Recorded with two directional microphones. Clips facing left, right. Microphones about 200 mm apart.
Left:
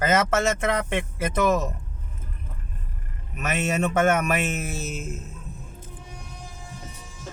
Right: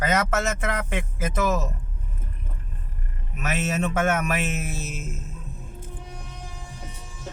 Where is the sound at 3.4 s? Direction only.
Centre (ahead or behind).